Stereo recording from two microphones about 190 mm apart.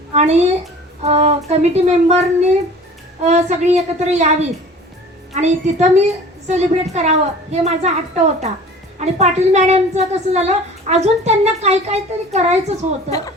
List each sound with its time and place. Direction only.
0.1 s a woman's voice: 35° right (ahead or behind)
3.2 s a woman's voice: 35° right (ahead or behind)
13.1 s a woman's voice: 20° left (ahead or behind)